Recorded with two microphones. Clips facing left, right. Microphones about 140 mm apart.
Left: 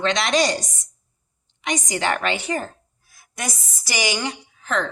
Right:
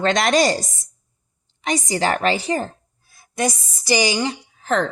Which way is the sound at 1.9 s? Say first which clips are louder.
Right 4 dB; 35° right (ahead or behind).